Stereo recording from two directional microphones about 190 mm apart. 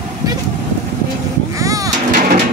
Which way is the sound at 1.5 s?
15° right (ahead or behind).